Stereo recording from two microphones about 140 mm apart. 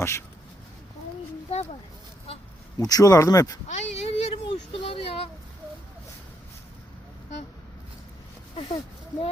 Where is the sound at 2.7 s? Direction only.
25° left (ahead or behind).